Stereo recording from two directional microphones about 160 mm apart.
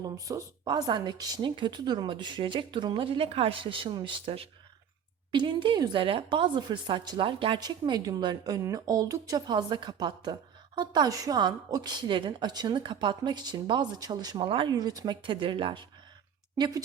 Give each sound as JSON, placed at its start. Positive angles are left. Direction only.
{"t": 0.3, "sound": "speech", "side_deg": -25}